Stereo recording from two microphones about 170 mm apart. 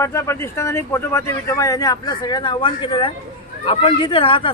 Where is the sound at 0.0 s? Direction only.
15° left (ahead or behind).